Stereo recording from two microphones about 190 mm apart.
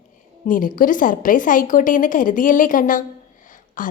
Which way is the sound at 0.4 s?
45° left (ahead or behind).